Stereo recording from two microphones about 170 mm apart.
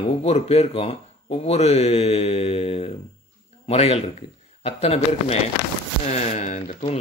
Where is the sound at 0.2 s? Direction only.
40° left (ahead or behind).